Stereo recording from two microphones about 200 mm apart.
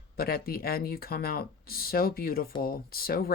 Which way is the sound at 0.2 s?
50° left (ahead or behind).